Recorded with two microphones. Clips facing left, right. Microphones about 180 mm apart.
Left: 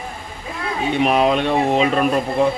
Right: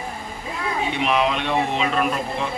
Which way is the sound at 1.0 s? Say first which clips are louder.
Left 6 dB; 40° left (ahead or behind).